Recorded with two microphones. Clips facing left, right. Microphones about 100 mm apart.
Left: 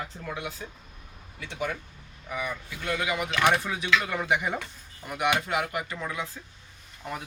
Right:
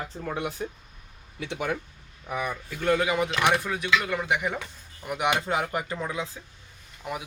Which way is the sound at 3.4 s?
Centre (ahead or behind).